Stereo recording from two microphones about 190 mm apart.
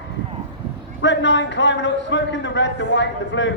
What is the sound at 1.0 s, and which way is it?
A man's voice, 70° left (ahead or behind).